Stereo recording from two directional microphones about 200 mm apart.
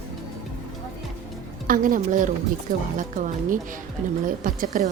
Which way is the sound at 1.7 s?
40° right (ahead or behind).